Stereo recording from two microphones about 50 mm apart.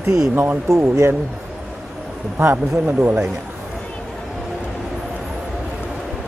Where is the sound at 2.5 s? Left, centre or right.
Right.